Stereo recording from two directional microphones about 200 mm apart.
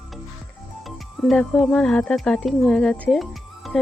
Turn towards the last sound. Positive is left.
turn(degrees=0)  # may be behind; listen again after turning